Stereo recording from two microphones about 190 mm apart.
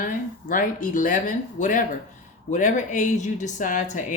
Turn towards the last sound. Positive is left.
turn(degrees=40)  # may be behind; listen again after turning